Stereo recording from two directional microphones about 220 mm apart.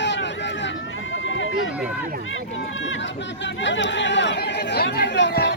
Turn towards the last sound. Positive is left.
turn(degrees=50)  # may be behind; listen again after turning